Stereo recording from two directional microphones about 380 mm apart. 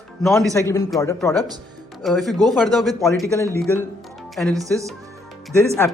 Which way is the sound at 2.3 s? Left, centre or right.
Centre.